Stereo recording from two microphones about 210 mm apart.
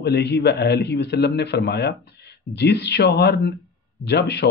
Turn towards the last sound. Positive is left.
turn(degrees=55)  # may be behind; listen again after turning